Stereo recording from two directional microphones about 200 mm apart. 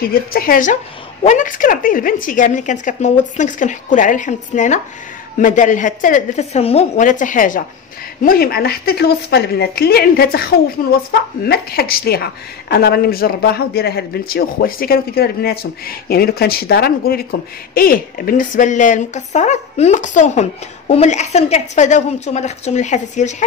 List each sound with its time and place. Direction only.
0.1 s a woman's voice: 50° left (ahead or behind)